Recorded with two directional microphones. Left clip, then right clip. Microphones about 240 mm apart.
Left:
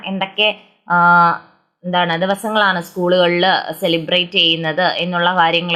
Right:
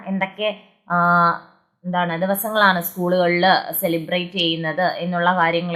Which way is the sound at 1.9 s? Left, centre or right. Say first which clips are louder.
Left 5 dB; centre.